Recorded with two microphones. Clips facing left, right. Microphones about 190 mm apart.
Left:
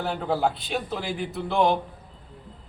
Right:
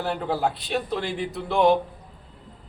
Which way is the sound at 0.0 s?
Centre (ahead or behind).